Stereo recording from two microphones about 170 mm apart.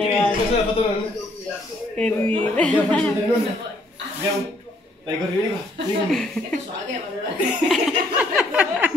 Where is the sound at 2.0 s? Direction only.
5° left (ahead or behind).